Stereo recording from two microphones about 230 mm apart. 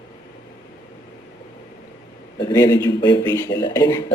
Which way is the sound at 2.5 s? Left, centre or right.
Centre.